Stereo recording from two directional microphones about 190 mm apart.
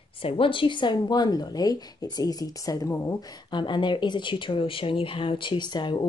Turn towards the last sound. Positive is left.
turn(degrees=25)  # may be behind; listen again after turning